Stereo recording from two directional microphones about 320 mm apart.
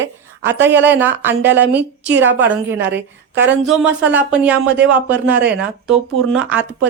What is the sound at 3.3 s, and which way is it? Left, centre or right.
Speech, right.